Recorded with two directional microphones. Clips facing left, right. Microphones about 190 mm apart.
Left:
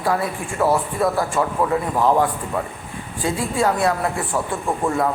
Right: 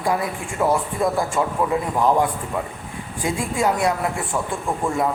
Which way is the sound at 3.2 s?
15° right (ahead or behind).